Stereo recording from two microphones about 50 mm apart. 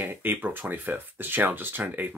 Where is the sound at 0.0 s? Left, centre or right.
Right.